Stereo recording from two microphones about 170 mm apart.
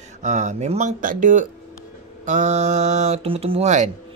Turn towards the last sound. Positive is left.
turn(degrees=-40)  # may be behind; listen again after turning